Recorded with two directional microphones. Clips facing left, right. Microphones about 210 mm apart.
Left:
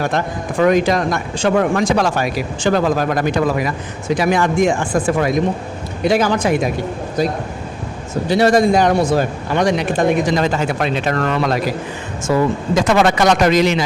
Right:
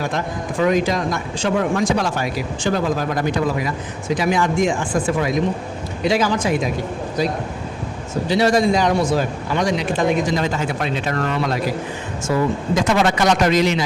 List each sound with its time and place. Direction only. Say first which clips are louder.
0.0 s a man's voice: left 4 dB; 65° left (ahead or behind)
7.2 s a man's voice: left 3 dB; 50° left (ahead or behind); by 11.6 s 80° left
12.9 s a man's voice: left 3 dB; 75° left (ahead or behind)